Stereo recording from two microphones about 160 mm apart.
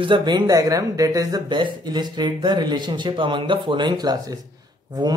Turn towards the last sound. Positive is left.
turn(degrees=-25)  # may be behind; listen again after turning